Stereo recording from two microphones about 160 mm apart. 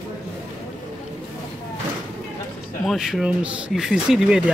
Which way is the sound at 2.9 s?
5° right (ahead or behind).